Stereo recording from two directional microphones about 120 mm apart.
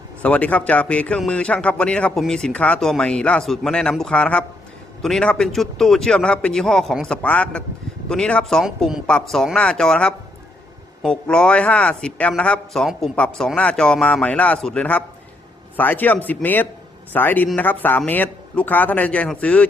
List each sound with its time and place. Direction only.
0.2 s a man's voice: 10° left (ahead or behind)